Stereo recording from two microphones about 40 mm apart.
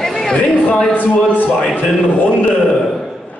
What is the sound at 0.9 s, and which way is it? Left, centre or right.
Speech, left.